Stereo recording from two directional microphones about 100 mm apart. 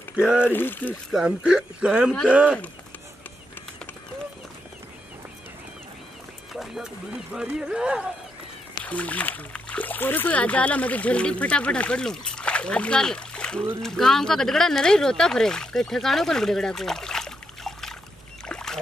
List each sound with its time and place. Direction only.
0.5 s speech: 20° left (ahead or behind)
1.1 s speech: 10° right (ahead or behind)
6.5 s speech: 5° right (ahead or behind)
8.8 s speech: 15° left (ahead or behind)
18.5 s rowboat: 5° left (ahead or behind)